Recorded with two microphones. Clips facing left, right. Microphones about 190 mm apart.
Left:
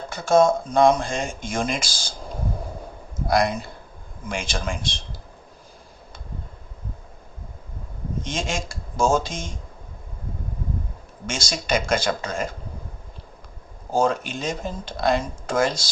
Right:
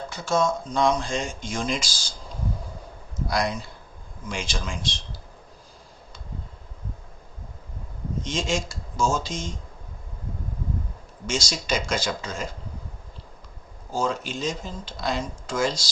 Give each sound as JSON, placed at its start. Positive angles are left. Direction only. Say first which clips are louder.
{"t": 0.1, "sound": "speech", "louder": "left 7 dB", "side_deg": 55}
{"t": 8.2, "sound": "speech", "louder": "right 2 dB", "side_deg": 55}
{"t": 11.3, "sound": "speech", "louder": "left 2 dB", "side_deg": 55}
{"t": 13.9, "sound": "speech", "louder": "left 5 dB", "side_deg": 55}